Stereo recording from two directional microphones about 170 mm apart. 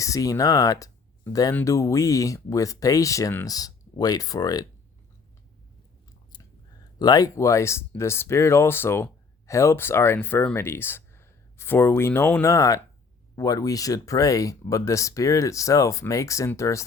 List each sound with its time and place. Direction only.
0.0 s speech: 20° left (ahead or behind)
7.0 s speech: 20° left (ahead or behind)